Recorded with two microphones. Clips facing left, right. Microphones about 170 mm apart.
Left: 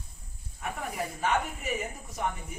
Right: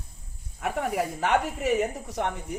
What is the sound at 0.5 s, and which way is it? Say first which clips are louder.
A woman's voice: right 7 dB; 75° right (ahead or behind).